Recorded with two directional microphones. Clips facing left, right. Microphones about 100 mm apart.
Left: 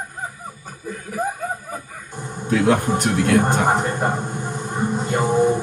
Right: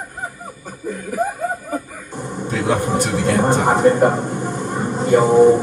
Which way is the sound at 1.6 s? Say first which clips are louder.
Right 6 dB; 15° right (ahead or behind).